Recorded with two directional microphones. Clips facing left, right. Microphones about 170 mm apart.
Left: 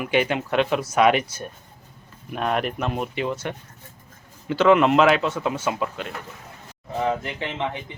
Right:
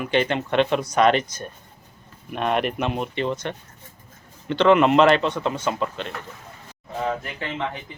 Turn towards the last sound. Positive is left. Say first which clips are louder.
# left 1 dB
turn(degrees=20)  # may be behind; listen again after turning